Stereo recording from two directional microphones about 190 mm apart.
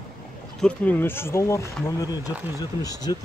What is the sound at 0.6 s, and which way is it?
Speech, 5° left (ahead or behind).